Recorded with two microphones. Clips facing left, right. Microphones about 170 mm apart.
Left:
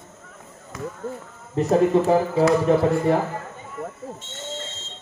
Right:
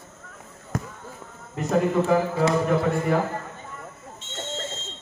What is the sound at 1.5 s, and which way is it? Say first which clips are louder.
Speech: left 5 dB; 30° left (ahead or behind).